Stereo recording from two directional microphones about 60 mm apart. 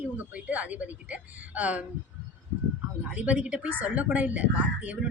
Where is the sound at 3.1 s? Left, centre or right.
Right.